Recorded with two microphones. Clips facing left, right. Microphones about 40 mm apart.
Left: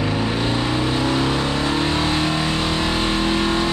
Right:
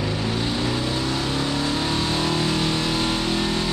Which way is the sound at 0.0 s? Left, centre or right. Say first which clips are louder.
Left 4 dB; left.